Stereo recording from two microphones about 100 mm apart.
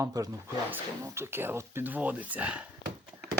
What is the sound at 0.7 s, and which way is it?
Speech, 25° right (ahead or behind).